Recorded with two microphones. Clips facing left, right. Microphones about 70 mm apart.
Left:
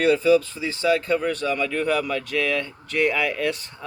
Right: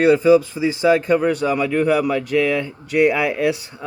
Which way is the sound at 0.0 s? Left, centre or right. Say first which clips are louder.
Right 5 dB; centre.